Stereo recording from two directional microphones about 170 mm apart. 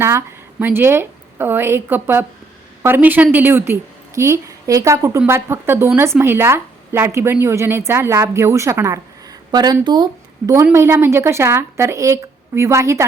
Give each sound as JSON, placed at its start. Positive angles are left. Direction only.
{"t": 0.0, "sound": "a woman's voice", "side_deg": -15}